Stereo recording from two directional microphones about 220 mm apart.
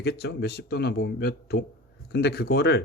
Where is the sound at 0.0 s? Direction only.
45° left (ahead or behind).